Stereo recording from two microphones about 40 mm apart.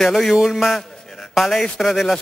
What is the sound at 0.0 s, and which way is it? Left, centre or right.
A man's voice, centre.